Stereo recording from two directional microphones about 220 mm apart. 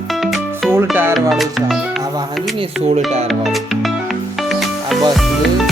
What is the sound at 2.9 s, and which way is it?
Speech, 30° right (ahead or behind).